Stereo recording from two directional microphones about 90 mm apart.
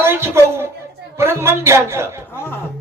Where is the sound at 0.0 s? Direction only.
30° right (ahead or behind).